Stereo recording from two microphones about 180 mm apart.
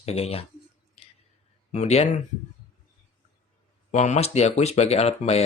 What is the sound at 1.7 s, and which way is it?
Speech, 40° left (ahead or behind).